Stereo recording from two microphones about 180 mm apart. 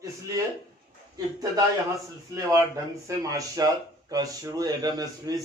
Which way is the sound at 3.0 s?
20° right (ahead or behind).